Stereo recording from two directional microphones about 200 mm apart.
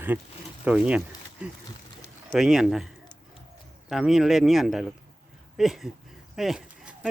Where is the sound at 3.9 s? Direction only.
Centre (ahead or behind).